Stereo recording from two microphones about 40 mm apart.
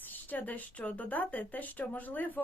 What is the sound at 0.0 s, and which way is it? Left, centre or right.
Speech, left.